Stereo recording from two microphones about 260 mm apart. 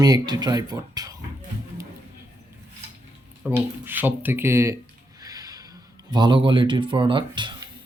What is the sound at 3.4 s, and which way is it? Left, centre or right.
Speech, centre.